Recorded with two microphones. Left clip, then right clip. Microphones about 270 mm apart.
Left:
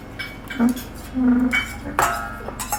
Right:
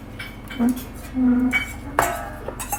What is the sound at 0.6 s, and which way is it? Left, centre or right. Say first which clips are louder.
Cutlery: left 1 dB; centre.